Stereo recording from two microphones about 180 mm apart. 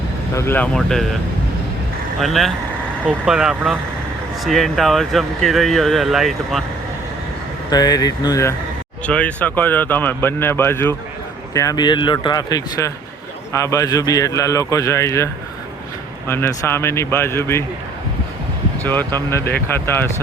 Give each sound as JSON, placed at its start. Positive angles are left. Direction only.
{"t": 0.3, "sound": "speech", "side_deg": 10}
{"t": 2.2, "sound": "speech", "side_deg": 0}
{"t": 7.7, "sound": "speech", "side_deg": 20}
{"t": 9.0, "sound": "speech", "side_deg": 5}
{"t": 18.8, "sound": "speech", "side_deg": 10}